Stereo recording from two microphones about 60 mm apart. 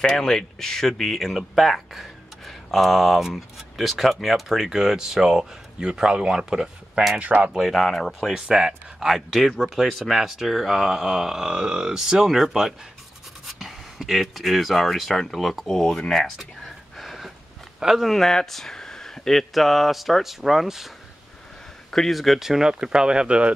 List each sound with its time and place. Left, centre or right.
0.0 s speech: centre
7.2 s speech: right
7.5 s speech: centre
8.3 s speech: centre
16.3 s a sound: centre
17.7 s speech: centre
18.1 s speech: centre
21.9 s speech: centre